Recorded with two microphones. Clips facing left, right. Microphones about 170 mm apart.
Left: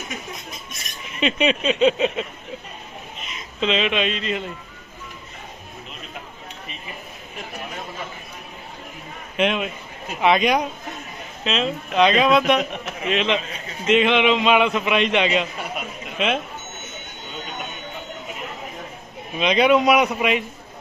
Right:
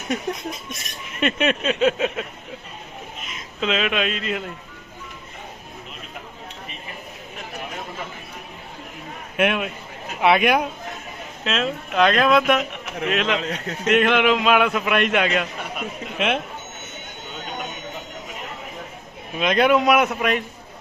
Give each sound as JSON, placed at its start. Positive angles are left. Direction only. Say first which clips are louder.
{"t": 1.2, "sound": "speech", "louder": "left 1 dB", "side_deg": 0}
{"t": 9.4, "sound": "speech", "louder": "even", "side_deg": -5}
{"t": 13.4, "sound": "a man's voice", "louder": "right 7 dB", "side_deg": -75}
{"t": 13.8, "sound": "speech", "louder": "left 1 dB", "side_deg": 0}
{"t": 19.4, "sound": "speech", "louder": "left 1 dB", "side_deg": 0}